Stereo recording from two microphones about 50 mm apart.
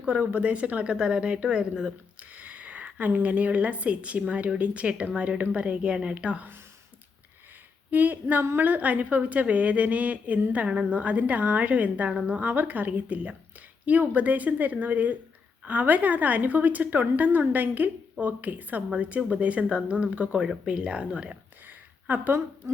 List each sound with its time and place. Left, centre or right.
0.0 s a woman's voice: right
2.3 s a woman's voice: right
7.9 s a woman's voice: right
22.0 s a woman's voice: right